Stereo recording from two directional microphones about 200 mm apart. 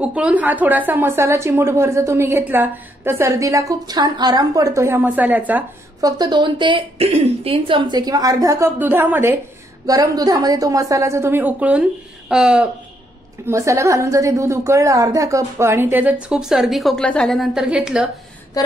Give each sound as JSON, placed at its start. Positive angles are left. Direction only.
{"t": 0.0, "sound": "a woman's voice", "side_deg": -5}
{"t": 13.5, "sound": "a woman's voice", "side_deg": -15}